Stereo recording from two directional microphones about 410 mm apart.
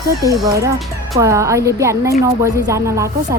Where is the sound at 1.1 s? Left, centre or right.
Centre.